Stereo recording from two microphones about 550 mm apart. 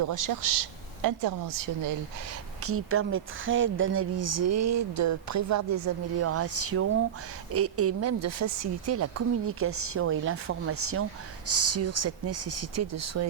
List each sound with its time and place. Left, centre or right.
0.0 s a woman's voice: right
2.6 s speech: right